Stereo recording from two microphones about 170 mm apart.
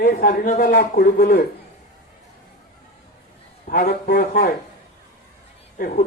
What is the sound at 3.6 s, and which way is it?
Speech, 55° left (ahead or behind).